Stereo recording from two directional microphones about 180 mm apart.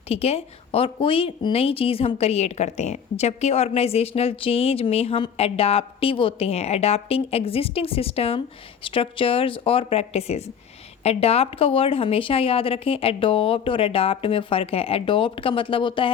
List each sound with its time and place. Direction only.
0.1 s a woman's voice: 35° left (ahead or behind)